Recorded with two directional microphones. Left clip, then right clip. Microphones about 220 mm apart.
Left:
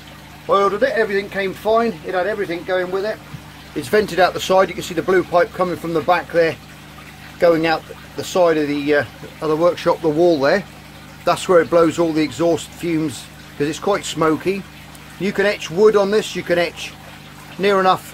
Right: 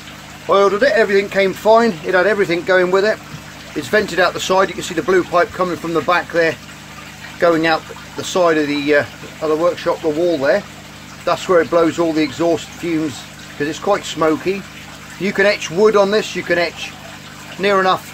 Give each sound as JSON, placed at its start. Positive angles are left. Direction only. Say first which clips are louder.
{"t": 0.5, "sound": "a man's voice", "louder": "right 3 dB", "side_deg": -5}
{"t": 3.8, "sound": "speech", "louder": "even", "side_deg": 10}
{"t": 9.4, "sound": "speech", "louder": "even", "side_deg": 20}
{"t": 11.2, "sound": "speech", "louder": "even", "side_deg": 15}
{"t": 15.2, "sound": "speech", "louder": "right 4 dB", "side_deg": 0}